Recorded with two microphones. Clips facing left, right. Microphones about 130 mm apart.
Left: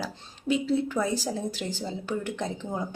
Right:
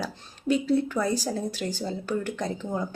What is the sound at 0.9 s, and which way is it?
A woman's voice, 15° left (ahead or behind).